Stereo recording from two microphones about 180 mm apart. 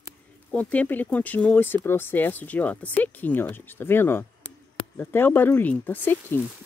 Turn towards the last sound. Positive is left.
turn(degrees=10)  # may be behind; listen again after turning